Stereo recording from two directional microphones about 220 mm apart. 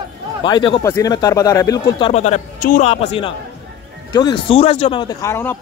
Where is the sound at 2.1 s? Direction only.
30° left (ahead or behind).